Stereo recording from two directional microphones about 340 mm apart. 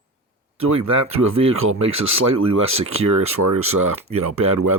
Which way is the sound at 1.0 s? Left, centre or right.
Right.